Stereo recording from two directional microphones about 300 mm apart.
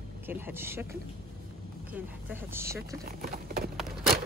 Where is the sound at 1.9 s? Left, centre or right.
Centre.